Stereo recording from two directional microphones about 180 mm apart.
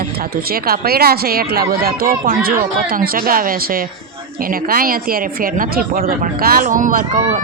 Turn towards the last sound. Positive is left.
turn(degrees=-45)  # may be behind; listen again after turning